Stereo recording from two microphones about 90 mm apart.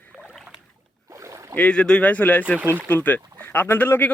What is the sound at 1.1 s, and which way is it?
Rowboat, 35° right (ahead or behind).